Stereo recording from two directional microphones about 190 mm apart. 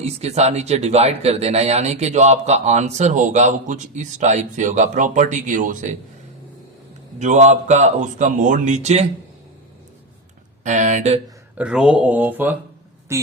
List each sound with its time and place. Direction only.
0.0 s speech: 35° right (ahead or behind)
7.2 s speech: 40° right (ahead or behind)
10.6 s speech: 40° right (ahead or behind)
11.5 s a woman's voice: 5° right (ahead or behind)